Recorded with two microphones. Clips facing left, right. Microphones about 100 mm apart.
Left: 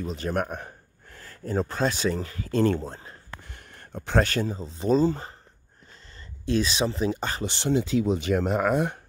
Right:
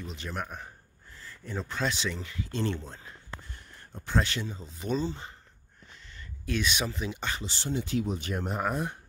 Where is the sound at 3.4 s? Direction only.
70° left (ahead or behind).